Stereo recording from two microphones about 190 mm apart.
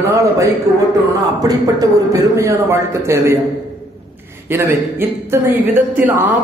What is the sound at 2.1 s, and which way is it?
Speech, 15° right (ahead or behind).